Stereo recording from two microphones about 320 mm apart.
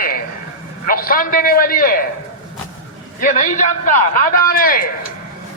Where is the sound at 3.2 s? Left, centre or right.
Left.